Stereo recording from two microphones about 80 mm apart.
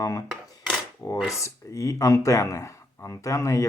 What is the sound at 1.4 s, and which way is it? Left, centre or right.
Speech, left.